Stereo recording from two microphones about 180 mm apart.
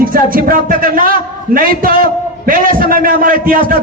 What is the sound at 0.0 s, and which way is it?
A man's voice, 50° right (ahead or behind).